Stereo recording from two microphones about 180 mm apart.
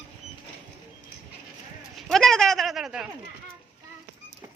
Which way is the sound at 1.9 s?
Centre (ahead or behind).